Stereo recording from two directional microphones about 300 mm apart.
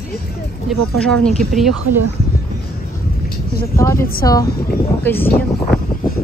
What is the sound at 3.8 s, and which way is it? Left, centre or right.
Speech, centre.